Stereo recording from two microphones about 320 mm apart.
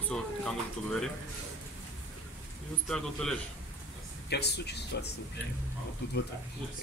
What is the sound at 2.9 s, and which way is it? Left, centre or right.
Speech, centre.